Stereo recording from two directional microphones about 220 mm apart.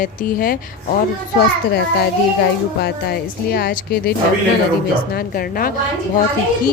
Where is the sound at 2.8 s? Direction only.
45° left (ahead or behind).